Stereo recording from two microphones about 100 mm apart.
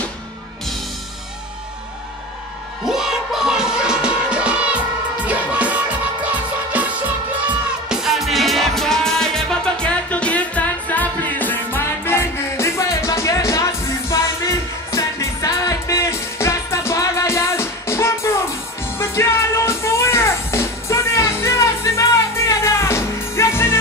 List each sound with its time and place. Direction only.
2.8 s music: 5° right (ahead or behind); by 23.8 s 25° left (ahead or behind)